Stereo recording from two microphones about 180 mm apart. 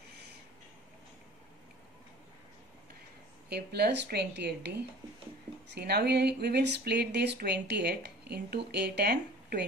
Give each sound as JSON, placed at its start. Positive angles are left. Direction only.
{"t": 3.4, "sound": "speech", "side_deg": -65}